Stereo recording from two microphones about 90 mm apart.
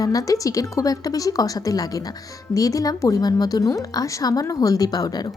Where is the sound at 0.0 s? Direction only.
40° left (ahead or behind).